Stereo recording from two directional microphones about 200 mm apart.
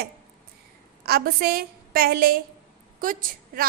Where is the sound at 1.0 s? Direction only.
50° right (ahead or behind).